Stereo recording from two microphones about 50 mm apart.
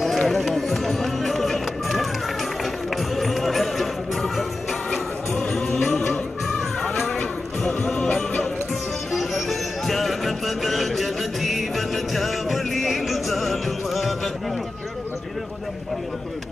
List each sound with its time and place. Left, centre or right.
0.2 s music: centre
3.2 s music: centre
7.2 s music: left
9.1 s music: centre